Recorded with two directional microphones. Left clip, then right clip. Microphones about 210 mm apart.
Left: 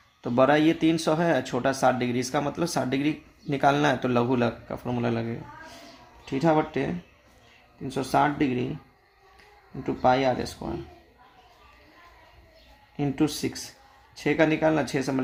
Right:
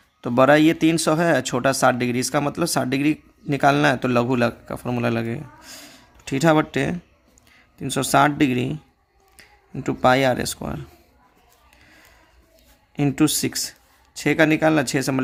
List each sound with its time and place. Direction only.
0.2 s speech: 35° right (ahead or behind)
13.0 s speech: 45° right (ahead or behind)